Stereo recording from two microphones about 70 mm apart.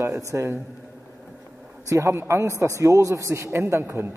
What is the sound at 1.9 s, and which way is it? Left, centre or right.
A man's voice, right.